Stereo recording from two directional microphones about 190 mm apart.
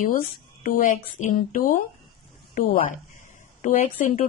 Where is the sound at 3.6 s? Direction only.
40° left (ahead or behind).